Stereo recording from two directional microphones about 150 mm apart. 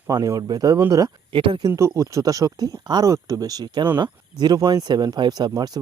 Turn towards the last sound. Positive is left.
turn(degrees=-25)  # may be behind; listen again after turning